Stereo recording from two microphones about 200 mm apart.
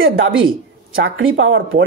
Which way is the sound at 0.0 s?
80° right.